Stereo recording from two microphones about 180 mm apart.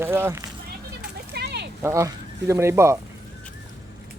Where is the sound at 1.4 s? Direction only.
65° right (ahead or behind).